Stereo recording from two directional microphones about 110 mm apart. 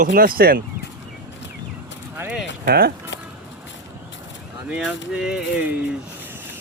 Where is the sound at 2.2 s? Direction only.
20° right (ahead or behind).